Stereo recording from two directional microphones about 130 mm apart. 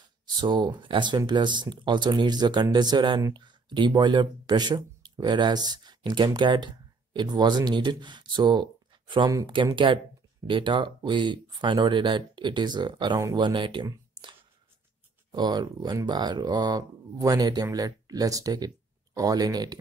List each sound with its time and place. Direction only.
0.3 s speech: 35° right (ahead or behind)
9.5 s speech: 40° right (ahead or behind)
15.3 s speech: 35° right (ahead or behind)